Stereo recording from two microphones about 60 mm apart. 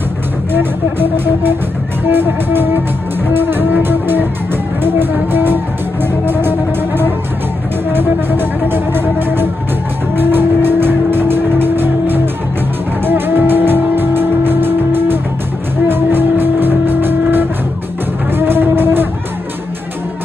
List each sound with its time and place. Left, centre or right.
0.5 s speech: right
7.9 s speech: right
10.1 s music: right
15.9 s vehicle: right
18.4 s a sound: right